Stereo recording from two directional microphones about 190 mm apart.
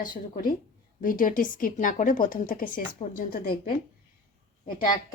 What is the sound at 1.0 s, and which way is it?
A woman's voice, 45° left (ahead or behind).